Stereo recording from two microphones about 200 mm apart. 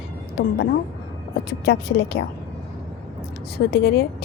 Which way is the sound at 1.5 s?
55° left (ahead or behind).